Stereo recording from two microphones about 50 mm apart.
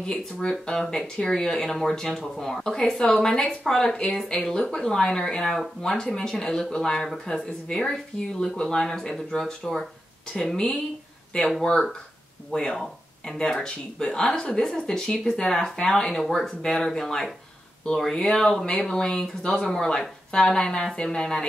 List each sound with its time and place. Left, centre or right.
0.0 s speech: centre